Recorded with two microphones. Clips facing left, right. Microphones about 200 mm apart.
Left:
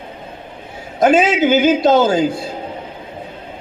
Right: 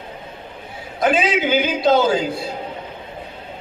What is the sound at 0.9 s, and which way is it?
A man's voice, 45° left (ahead or behind).